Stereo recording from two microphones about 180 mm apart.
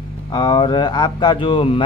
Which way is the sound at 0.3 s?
25° left (ahead or behind).